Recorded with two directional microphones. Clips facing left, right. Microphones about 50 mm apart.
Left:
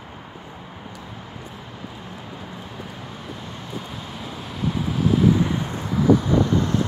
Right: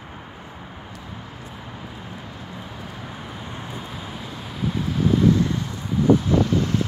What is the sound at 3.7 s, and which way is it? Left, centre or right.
Vehicle, centre.